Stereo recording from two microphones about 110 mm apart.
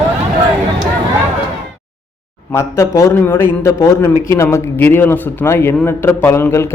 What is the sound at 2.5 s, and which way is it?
A man's voice, 25° left (ahead or behind).